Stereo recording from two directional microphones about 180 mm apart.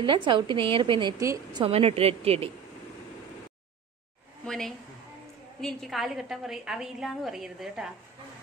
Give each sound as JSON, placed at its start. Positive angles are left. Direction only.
{"t": 0.0, "sound": "a woman's voice", "side_deg": -25}
{"t": 1.6, "sound": "speech", "side_deg": -30}
{"t": 4.5, "sound": "a woman's voice", "side_deg": 0}